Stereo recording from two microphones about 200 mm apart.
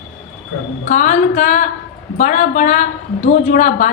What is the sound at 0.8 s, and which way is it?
A woman's voice, 40° left (ahead or behind).